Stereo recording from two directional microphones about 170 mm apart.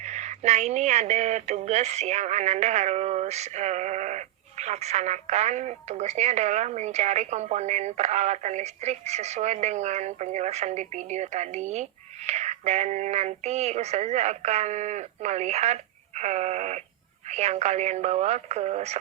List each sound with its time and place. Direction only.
0.0 s speech: 45° right (ahead or behind)